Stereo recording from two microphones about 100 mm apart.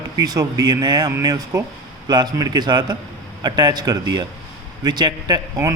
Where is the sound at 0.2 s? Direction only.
40° right (ahead or behind).